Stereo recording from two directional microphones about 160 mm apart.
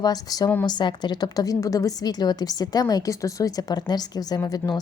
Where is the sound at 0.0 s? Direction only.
25° left (ahead or behind).